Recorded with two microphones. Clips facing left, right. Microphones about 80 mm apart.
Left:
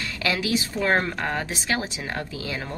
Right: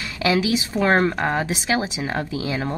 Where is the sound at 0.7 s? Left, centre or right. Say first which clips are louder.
Right 7 dB; centre.